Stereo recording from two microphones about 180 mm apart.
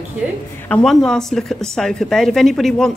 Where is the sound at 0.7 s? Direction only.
5° left (ahead or behind).